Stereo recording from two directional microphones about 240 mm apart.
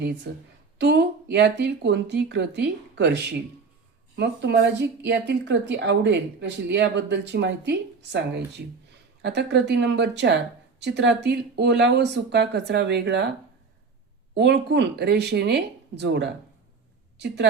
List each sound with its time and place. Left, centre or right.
0.3 s speech: right
9.2 s speech: right
14.3 s a woman's voice: right